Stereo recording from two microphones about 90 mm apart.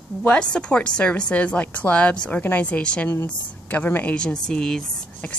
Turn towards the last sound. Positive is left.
turn(degrees=10)  # may be behind; listen again after turning